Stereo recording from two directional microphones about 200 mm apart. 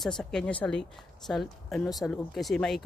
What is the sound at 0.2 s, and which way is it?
Speech, 5° left (ahead or behind).